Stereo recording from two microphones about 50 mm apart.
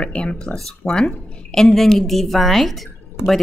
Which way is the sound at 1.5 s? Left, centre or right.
Centre.